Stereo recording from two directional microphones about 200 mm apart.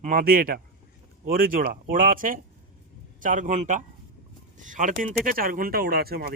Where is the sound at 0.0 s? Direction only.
45° right (ahead or behind).